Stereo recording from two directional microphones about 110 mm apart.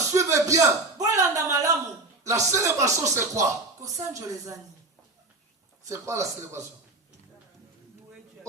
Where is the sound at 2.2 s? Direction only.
30° right (ahead or behind).